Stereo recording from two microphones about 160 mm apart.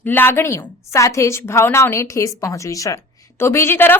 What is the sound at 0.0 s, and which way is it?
A woman's voice, 15° left (ahead or behind).